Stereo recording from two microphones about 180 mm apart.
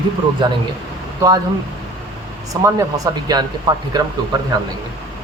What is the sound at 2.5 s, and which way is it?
Speech, 15° right (ahead or behind).